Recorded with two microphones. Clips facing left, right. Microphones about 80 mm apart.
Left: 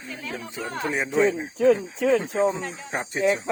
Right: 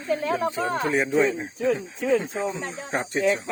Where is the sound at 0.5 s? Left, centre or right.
Right.